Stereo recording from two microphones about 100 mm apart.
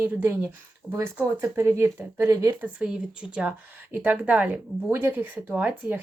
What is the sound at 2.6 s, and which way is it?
Speech, 10° right (ahead or behind).